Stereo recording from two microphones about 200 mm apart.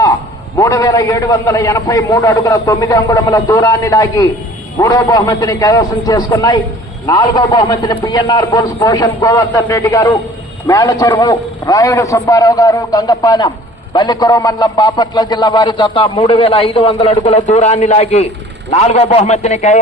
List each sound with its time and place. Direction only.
0.5 s a man's voice: 15° left (ahead or behind); by 19.8 s 35° left (ahead or behind)